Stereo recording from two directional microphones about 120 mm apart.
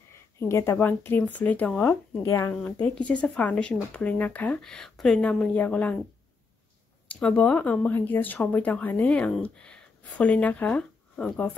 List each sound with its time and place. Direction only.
0.1 s speech: 25° left (ahead or behind)
2.2 s speech: 25° left (ahead or behind)
2.5 s speech: 10° left (ahead or behind)
7.1 s speech: 10° left (ahead or behind)